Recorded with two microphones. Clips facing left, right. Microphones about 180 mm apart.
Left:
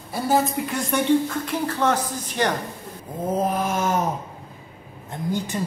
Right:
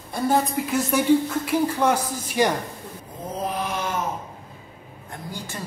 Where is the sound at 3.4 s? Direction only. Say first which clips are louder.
Left 2 dB; 45° left (ahead or behind).